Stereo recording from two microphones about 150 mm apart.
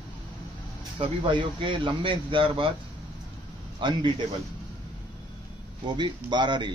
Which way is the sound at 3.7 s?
30° right (ahead or behind).